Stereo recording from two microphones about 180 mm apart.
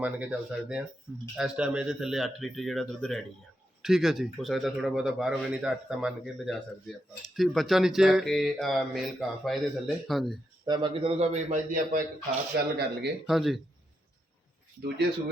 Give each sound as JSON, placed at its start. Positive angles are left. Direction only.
{"t": 0.0, "sound": "a man's voice", "side_deg": -5}
{"t": 10.7, "sound": "a man's voice", "side_deg": -25}
{"t": 12.5, "sound": "speech", "side_deg": -65}
{"t": 13.2, "sound": "a man's voice", "side_deg": 0}